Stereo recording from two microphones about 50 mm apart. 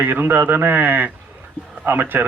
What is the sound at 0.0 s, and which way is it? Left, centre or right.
A man's voice, right.